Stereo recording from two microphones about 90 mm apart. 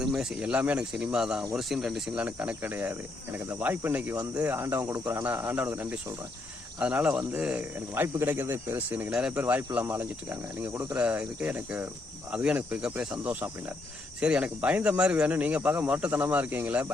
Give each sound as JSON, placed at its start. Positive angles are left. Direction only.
{"t": 0.0, "sound": "speech", "side_deg": -5}
{"t": 2.2, "sound": "speech", "side_deg": -20}
{"t": 10.9, "sound": "speech", "side_deg": -15}